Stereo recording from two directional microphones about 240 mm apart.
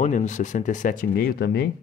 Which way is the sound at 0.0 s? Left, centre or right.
Left.